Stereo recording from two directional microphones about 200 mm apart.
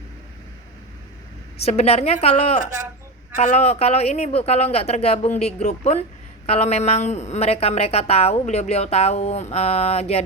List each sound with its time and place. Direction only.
1.6 s a woman's voice: 30° left (ahead or behind)